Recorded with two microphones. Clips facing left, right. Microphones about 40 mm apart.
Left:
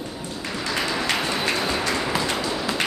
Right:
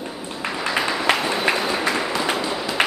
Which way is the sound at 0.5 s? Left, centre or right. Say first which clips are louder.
Right 3 dB; right.